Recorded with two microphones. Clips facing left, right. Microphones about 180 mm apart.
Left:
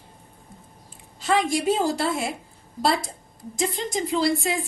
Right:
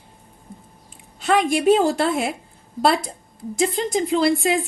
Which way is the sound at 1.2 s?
60° right (ahead or behind).